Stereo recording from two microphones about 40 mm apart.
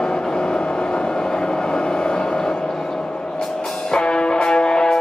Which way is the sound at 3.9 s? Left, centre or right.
Left.